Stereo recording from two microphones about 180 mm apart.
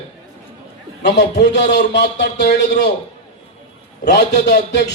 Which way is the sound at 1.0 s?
70° left (ahead or behind).